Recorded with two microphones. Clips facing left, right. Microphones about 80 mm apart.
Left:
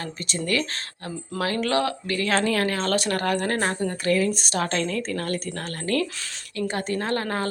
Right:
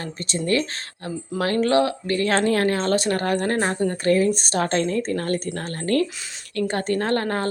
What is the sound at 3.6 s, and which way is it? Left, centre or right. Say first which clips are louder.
Speech: right 3 dB; right.